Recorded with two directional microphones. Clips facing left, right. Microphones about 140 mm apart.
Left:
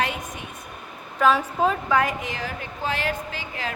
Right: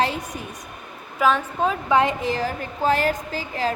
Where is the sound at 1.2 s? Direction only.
5° right (ahead or behind).